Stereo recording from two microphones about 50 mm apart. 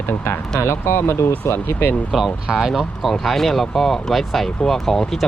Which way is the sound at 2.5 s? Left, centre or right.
Centre.